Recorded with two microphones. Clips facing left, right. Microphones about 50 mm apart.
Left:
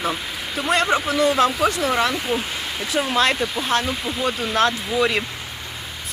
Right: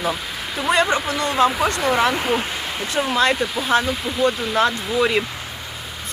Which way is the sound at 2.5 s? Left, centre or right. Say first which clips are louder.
Right 1 dB; centre.